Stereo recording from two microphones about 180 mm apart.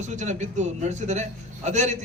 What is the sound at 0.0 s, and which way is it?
A man's voice, 40° right (ahead or behind).